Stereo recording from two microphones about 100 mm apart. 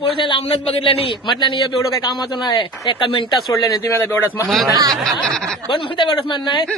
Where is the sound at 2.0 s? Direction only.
50° left (ahead or behind).